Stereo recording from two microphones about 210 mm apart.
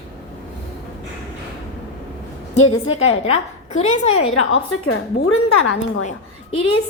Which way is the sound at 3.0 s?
30° left (ahead or behind).